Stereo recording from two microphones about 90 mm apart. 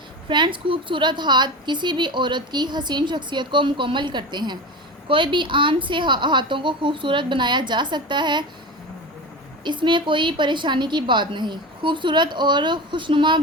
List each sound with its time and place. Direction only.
0.3 s a woman's voice: 60° right (ahead or behind)
9.6 s a woman's voice: 60° right (ahead or behind)